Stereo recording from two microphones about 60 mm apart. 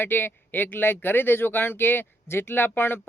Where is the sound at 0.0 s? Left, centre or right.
Left.